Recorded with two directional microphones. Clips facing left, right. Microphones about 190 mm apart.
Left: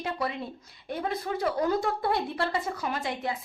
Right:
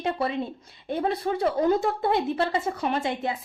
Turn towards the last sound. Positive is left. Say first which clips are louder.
# right 4 dB
turn(degrees=-25)  # may be behind; listen again after turning